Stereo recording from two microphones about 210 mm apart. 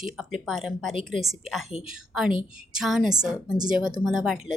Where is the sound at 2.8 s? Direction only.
Centre (ahead or behind).